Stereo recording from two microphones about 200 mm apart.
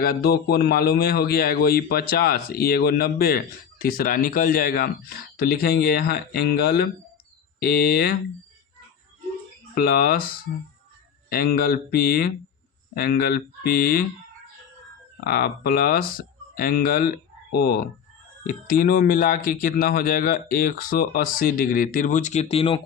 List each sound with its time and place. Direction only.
0.0 s a man's voice: 50° left (ahead or behind)
9.7 s a man's voice: 50° left (ahead or behind)
11.3 s a man's voice: 50° left (ahead or behind)
15.2 s a man's voice: 50° left (ahead or behind)
18.4 s a man's voice: 45° left (ahead or behind); by 22.8 s 25° left (ahead or behind)